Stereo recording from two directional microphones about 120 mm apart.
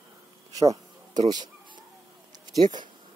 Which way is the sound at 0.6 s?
30° right (ahead or behind).